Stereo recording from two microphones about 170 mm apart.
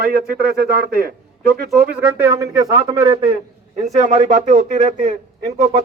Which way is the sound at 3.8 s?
45° right (ahead or behind).